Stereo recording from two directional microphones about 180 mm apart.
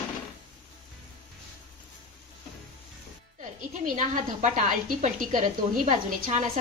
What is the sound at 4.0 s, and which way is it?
A woman's voice, 45° right (ahead or behind).